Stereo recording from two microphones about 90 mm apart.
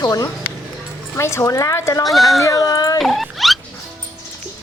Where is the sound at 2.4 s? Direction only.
40° left (ahead or behind).